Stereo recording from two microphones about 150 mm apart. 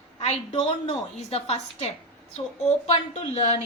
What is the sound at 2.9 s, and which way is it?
Speech, 45° left (ahead or behind).